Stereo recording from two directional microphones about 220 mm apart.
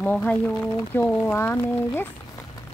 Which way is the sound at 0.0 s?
5° left (ahead or behind).